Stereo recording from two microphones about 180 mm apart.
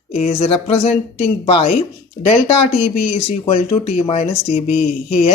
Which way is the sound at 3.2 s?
35° left (ahead or behind).